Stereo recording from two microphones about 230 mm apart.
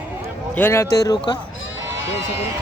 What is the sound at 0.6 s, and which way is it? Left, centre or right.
Speech, centre.